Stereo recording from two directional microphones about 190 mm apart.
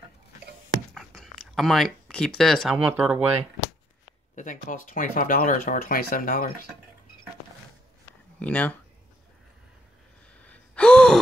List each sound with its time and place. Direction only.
0.9 s speech: centre (ahead or behind)
4.4 s speech: 45° left (ahead or behind)
8.4 s speech: 5° left (ahead or behind)
10.4 s gasp: 5° left (ahead or behind)